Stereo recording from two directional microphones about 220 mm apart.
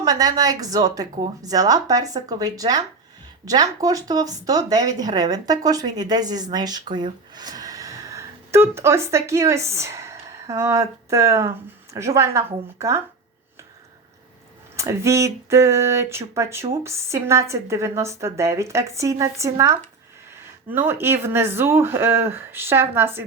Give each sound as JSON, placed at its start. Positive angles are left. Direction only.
{"t": 0.0, "sound": "a woman's voice", "side_deg": -15}
{"t": 14.8, "sound": "a woman's voice", "side_deg": -15}